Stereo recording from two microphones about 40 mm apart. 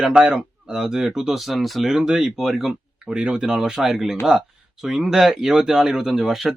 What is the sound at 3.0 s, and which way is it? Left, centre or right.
Speech, right.